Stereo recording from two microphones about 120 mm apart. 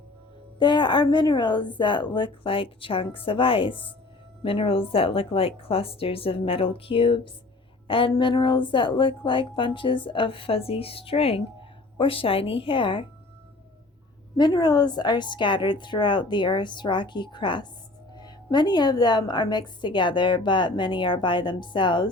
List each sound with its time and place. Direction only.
0.6 s a woman's voice: 40° left (ahead or behind)
14.3 s a woman's voice: 35° left (ahead or behind)